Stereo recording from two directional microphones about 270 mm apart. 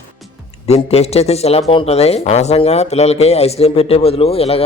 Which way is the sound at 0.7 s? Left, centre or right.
Left.